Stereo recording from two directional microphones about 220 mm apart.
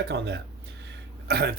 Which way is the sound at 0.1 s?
50° right (ahead or behind).